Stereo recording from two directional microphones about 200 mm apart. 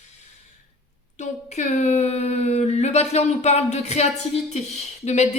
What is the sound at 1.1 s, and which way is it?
Speech, 35° left (ahead or behind).